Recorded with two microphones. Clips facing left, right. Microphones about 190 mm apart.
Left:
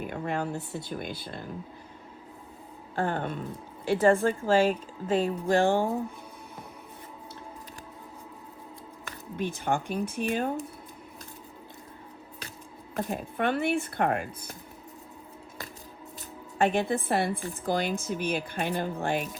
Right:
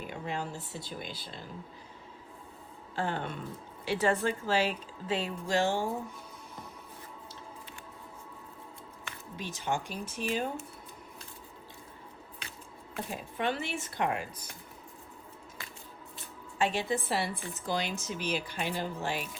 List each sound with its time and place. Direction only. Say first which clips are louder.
0.0 s speech: left 6 dB; 55° left (ahead or behind)
2.9 s a woman's voice: left 4 dB; 50° left (ahead or behind)
9.0 s speech: left 9 dB; 55° left (ahead or behind)
13.1 s speech: left 4 dB; 55° left (ahead or behind)
16.6 s a woman's voice: left 5 dB; 55° left (ahead or behind)